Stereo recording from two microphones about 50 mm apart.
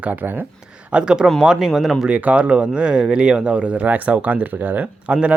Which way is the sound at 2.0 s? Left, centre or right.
Right.